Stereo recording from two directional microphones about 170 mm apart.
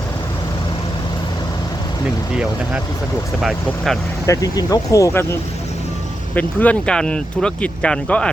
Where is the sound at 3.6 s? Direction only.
Centre (ahead or behind).